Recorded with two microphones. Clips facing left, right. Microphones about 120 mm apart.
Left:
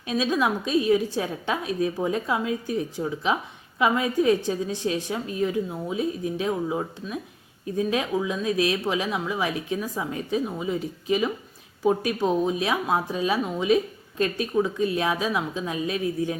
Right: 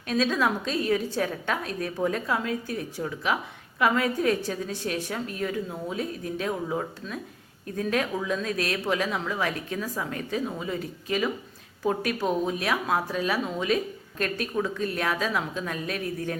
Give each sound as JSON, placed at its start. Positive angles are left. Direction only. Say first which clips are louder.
{"t": 0.1, "sound": "speech", "louder": "left 1 dB", "side_deg": 15}